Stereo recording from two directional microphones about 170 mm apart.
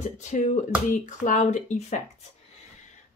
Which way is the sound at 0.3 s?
45° left (ahead or behind).